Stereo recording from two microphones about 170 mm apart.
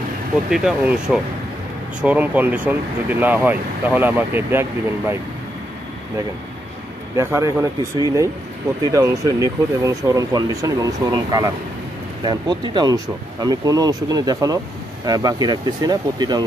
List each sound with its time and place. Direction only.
0.5 s speech: 5° right (ahead or behind)
7.2 s speech: 15° right (ahead or behind)
8.8 s speech: 20° right (ahead or behind)